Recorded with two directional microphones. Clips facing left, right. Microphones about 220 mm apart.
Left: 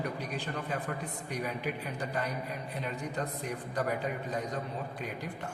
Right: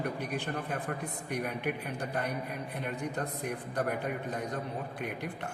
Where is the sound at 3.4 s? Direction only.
55° right (ahead or behind).